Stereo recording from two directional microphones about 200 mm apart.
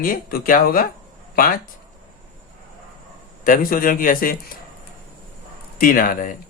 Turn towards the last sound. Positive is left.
turn(degrees=45)  # may be behind; listen again after turning